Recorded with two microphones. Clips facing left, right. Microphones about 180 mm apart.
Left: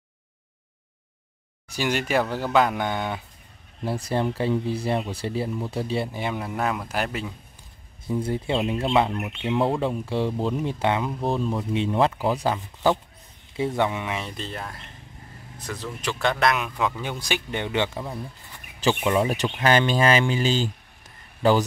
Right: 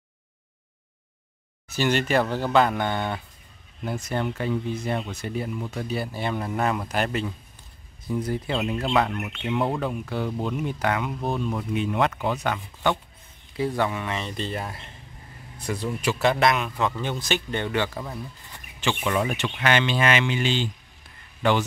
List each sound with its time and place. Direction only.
1.7 s speech: 10° left (ahead or behind)
3.8 s speech: 30° left (ahead or behind)
6.1 s speech: 10° left (ahead or behind)
8.1 s speech: 25° left (ahead or behind)
13.6 s speech: 20° left (ahead or behind)
18.8 s a man's voice: 35° left (ahead or behind)